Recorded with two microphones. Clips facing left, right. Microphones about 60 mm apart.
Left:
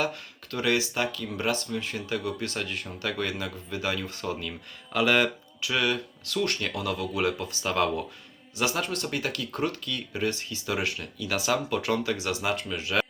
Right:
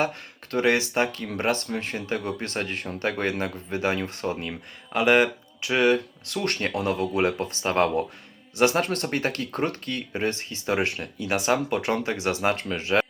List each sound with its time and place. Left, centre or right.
0.0 s speech: right